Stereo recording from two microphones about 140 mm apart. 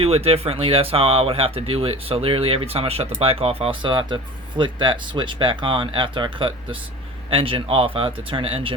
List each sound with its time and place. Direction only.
0.0 s speech: 45° right (ahead or behind)